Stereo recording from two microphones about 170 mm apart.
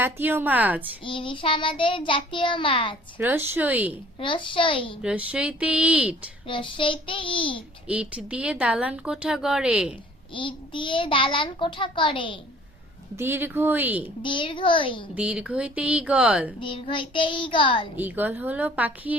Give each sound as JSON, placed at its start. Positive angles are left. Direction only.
{"t": 0.0, "sound": "speech", "side_deg": -10}
{"t": 1.0, "sound": "a child's voice", "side_deg": 30}
{"t": 3.2, "sound": "speech", "side_deg": -10}
{"t": 4.2, "sound": "a child's voice", "side_deg": 30}
{"t": 5.0, "sound": "speech", "side_deg": -5}
{"t": 6.5, "sound": "a child's voice", "side_deg": 30}
{"t": 7.9, "sound": "speech", "side_deg": -5}
{"t": 10.3, "sound": "a child's voice", "side_deg": 30}
{"t": 13.1, "sound": "speech", "side_deg": -15}
{"t": 14.2, "sound": "a child's voice", "side_deg": 30}
{"t": 15.1, "sound": "speech", "side_deg": -5}
{"t": 16.6, "sound": "a child's voice", "side_deg": 30}
{"t": 17.9, "sound": "speech", "side_deg": -10}